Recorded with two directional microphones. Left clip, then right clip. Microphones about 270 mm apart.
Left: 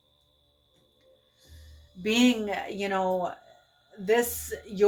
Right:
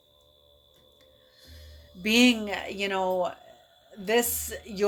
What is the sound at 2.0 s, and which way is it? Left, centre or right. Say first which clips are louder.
Speech: right 2 dB; right.